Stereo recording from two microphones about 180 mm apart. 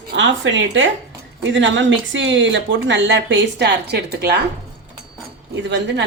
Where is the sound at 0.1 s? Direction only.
85° right; by 4.4 s 65° right (ahead or behind).